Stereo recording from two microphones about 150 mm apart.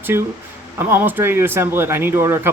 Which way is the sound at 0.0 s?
15° right (ahead or behind).